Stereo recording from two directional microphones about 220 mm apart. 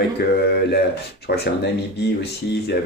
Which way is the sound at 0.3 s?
45° left (ahead or behind).